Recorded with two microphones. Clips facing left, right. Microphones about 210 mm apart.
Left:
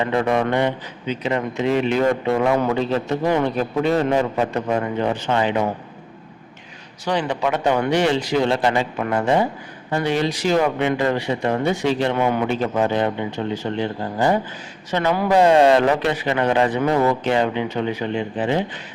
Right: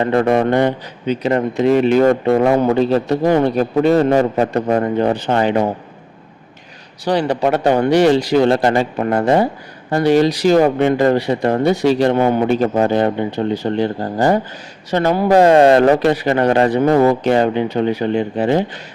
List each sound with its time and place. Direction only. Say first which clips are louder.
0.0 s speech: right 5 dB; 45° right (ahead or behind)
7.0 s speech: right 5 dB; 35° right (ahead or behind)
15.3 s speech: right 4 dB; 45° right (ahead or behind)